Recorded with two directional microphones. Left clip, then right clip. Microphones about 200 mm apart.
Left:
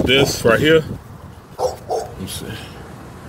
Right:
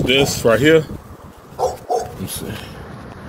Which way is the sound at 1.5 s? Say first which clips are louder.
Right 2 dB; 40° left (ahead or behind).